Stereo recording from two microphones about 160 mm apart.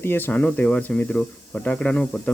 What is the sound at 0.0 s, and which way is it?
Speech, 15° left (ahead or behind).